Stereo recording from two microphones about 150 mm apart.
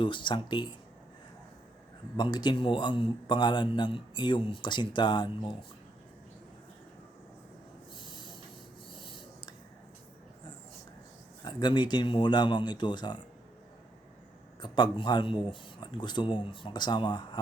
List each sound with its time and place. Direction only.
0.0 s a man's voice: 35° left (ahead or behind)
2.1 s a man's voice: 30° left (ahead or behind)
7.9 s owl: 30° left (ahead or behind)
8.9 s writing: 35° left (ahead or behind)
11.4 s a man's voice: 30° left (ahead or behind)
14.6 s a man's voice: 30° left (ahead or behind)